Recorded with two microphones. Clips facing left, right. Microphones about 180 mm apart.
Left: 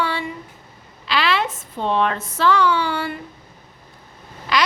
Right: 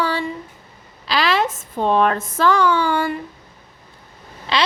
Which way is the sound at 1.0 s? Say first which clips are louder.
Right 2 dB; 40° right (ahead or behind).